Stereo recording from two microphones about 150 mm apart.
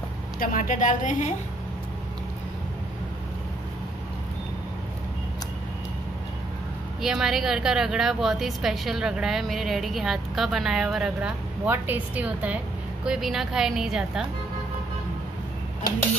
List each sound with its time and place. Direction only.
0.4 s a woman's voice: 65° left (ahead or behind)
7.0 s a woman's voice: 5° right (ahead or behind)